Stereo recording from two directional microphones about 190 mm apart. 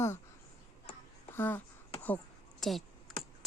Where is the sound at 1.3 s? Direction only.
10° left (ahead or behind).